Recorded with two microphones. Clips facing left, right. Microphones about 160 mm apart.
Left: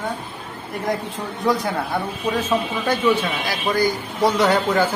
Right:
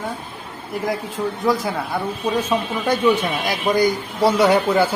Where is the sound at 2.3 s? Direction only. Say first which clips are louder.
Even; 10° right (ahead or behind).